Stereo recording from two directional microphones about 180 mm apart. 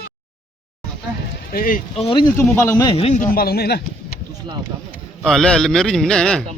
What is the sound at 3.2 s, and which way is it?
Speech, 55° left (ahead or behind).